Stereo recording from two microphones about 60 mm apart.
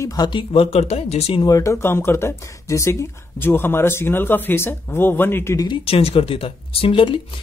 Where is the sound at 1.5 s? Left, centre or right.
Left.